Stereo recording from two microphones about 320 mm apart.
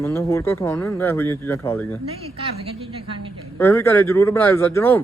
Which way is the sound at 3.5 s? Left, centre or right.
Centre.